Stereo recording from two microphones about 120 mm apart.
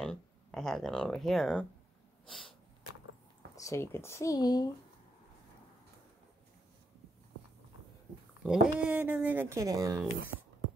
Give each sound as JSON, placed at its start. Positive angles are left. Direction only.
{"t": 0.0, "sound": "speech", "side_deg": 5}
{"t": 2.2, "sound": "a sound", "side_deg": 5}
{"t": 3.5, "sound": "speech", "side_deg": 25}
{"t": 8.5, "sound": "speech", "side_deg": -10}